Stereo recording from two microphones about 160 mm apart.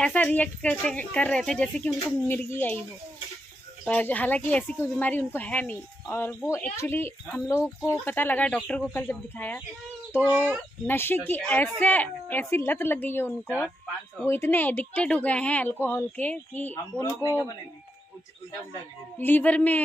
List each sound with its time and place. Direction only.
0.0 s speech: 10° left (ahead or behind)
2.2 s speech: 15° left (ahead or behind)
3.8 s speech: 10° left (ahead or behind)
10.2 s speech: 10° right (ahead or behind)
10.9 s speech: 15° left (ahead or behind)
19.1 s speech: 10° left (ahead or behind)